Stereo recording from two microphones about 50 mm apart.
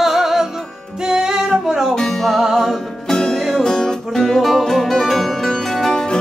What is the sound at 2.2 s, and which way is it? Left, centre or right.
Music, centre.